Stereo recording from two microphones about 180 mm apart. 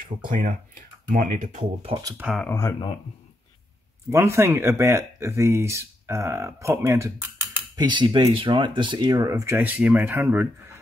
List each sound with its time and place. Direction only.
0.3 s speech: 50° right (ahead or behind)
1.6 s speech: 30° right (ahead or behind)
2.3 s speech: 10° left (ahead or behind)
4.1 s speech: 15° right (ahead or behind)
7.7 s speech: 25° right (ahead or behind)